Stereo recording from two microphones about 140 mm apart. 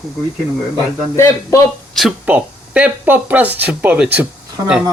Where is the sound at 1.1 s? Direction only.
20° left (ahead or behind).